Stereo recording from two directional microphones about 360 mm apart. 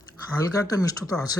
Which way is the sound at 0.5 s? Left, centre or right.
Centre.